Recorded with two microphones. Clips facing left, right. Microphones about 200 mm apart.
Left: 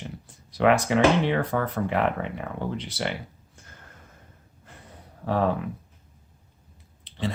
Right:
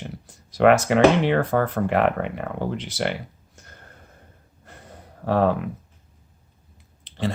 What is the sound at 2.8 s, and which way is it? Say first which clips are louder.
Speech: right 4 dB; 45° right (ahead or behind).